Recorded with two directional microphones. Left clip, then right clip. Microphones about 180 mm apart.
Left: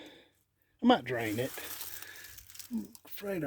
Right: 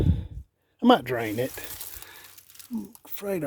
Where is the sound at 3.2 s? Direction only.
35° right (ahead or behind).